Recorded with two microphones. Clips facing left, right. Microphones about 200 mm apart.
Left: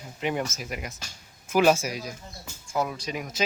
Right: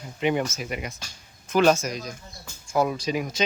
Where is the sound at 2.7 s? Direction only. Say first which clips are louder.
Right 5 dB; 30° right (ahead or behind).